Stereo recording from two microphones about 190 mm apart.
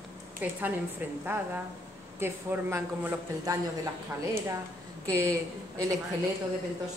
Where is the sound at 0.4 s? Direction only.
10° right (ahead or behind).